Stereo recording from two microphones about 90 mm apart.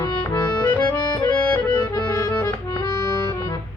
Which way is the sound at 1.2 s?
15° left (ahead or behind).